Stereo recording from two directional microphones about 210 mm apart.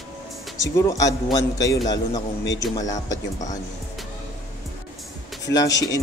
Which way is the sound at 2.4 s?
60° left (ahead or behind).